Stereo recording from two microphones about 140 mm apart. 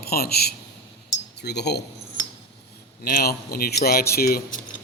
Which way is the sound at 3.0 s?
90° left.